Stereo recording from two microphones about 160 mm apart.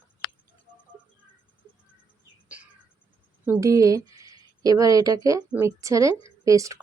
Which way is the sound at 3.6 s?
20° right (ahead or behind).